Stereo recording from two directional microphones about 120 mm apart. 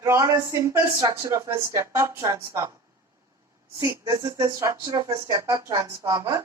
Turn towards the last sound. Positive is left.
turn(degrees=-25)  # may be behind; listen again after turning